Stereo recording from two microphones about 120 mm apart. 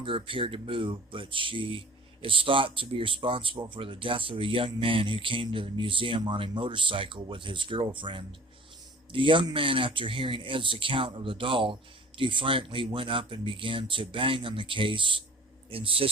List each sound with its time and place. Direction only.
0.0 s speech: 45° right (ahead or behind)